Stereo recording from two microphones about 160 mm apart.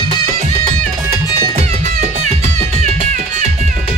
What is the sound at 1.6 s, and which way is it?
Music, 45° right (ahead or behind).